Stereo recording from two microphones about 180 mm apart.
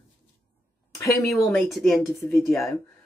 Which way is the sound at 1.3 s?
Centre (ahead or behind).